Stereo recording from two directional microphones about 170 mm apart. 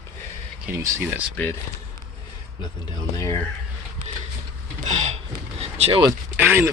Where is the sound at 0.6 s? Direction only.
15° right (ahead or behind).